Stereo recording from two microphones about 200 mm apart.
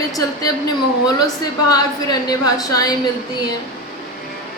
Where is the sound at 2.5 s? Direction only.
20° left (ahead or behind).